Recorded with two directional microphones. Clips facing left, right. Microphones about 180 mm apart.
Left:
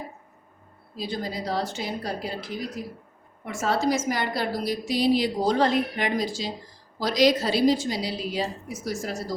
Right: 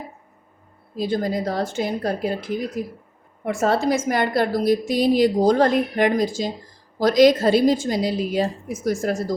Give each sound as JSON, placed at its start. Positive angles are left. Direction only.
{"t": 0.9, "sound": "a woman's voice", "side_deg": -50}